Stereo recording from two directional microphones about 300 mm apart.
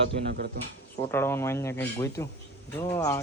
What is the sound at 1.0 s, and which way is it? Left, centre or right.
Speech, centre.